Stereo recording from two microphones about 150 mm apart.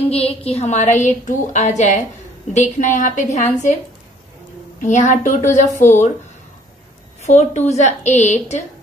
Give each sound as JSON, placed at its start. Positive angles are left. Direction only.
{"t": 0.1, "sound": "a woman's voice", "side_deg": 40}
{"t": 4.7, "sound": "a woman's voice", "side_deg": 55}
{"t": 7.2, "sound": "a woman's voice", "side_deg": 50}